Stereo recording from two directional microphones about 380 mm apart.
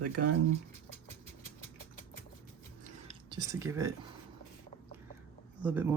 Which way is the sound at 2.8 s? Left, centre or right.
Centre.